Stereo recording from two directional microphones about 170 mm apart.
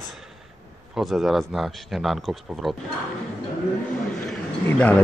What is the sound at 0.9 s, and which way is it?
Speech, centre (ahead or behind).